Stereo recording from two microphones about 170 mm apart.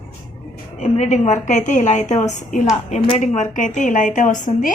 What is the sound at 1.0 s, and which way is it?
Speech, 40° left (ahead or behind).